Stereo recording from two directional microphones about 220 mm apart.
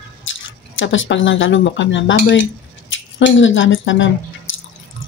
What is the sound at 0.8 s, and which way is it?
Speech, 60° left (ahead or behind).